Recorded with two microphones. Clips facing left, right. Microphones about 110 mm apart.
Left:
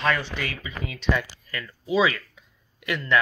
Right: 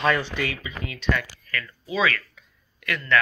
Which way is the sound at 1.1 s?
20° left (ahead or behind).